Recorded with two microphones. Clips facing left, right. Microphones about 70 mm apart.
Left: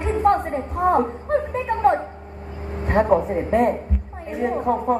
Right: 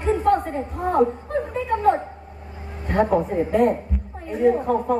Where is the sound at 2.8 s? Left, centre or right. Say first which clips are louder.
Left 2 dB; left.